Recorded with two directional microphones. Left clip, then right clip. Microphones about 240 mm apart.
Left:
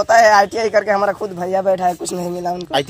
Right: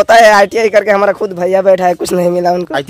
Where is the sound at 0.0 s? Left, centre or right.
Right.